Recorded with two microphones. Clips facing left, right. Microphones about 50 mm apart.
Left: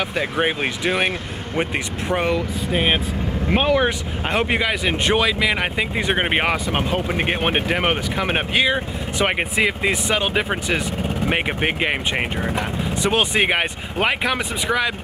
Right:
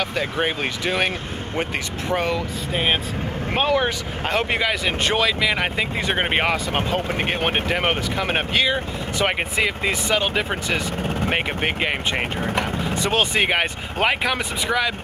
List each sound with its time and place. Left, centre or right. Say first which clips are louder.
0.0 s speech: left 2 dB; centre
2.1 s speech: left 2 dB; centre
6.6 s speech: left 1 dB; left
13.5 s speech: left 1 dB; centre